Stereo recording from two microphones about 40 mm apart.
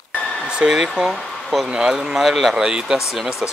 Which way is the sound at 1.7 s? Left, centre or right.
Centre.